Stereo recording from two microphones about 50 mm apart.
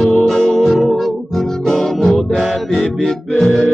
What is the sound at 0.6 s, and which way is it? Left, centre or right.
Music, centre.